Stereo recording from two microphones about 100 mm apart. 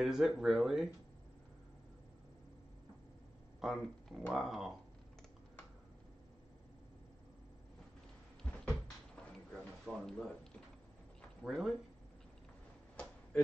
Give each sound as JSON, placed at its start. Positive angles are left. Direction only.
{"t": 0.0, "sound": "speech", "side_deg": -5}
{"t": 3.6, "sound": "speech", "side_deg": 0}
{"t": 8.6, "sound": "a sound", "side_deg": 5}
{"t": 11.4, "sound": "speech", "side_deg": -5}